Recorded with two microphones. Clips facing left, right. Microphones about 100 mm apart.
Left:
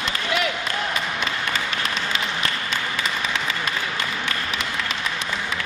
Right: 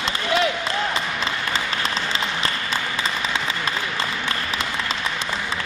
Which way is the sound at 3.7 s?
30° right (ahead or behind).